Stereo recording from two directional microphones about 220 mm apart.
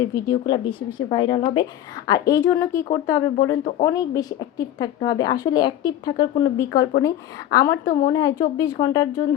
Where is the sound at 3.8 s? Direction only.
15° left (ahead or behind).